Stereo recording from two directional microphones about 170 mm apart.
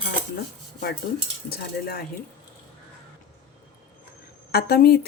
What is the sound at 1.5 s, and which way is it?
Speech, 65° left (ahead or behind).